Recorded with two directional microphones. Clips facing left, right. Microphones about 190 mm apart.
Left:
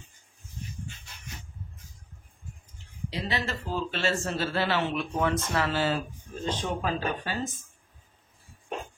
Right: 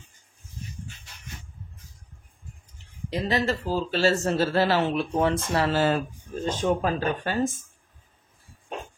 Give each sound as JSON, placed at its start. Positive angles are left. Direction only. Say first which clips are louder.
{"t": 3.1, "sound": "a man's voice", "louder": "right 7 dB", "side_deg": -45}